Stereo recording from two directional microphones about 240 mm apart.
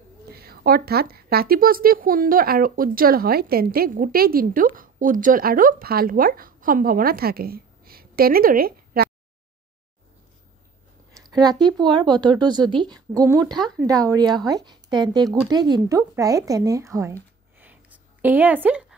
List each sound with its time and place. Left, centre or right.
0.3 s speech: right
11.1 s a woman's voice: centre